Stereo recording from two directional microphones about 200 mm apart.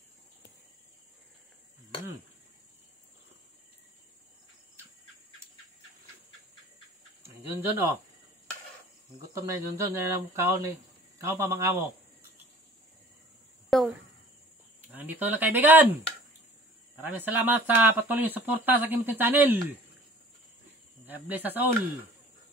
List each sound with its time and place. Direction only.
7.2 s speech: 15° right (ahead or behind)
9.3 s speech: 15° right (ahead or behind)
13.7 s a sound: centre (ahead or behind)
14.9 s speech: 10° right (ahead or behind)
21.1 s speech: 10° right (ahead or behind)